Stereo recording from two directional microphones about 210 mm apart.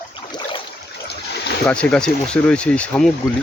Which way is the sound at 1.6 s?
5° left (ahead or behind).